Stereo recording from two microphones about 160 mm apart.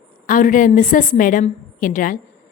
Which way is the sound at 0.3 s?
55° left (ahead or behind).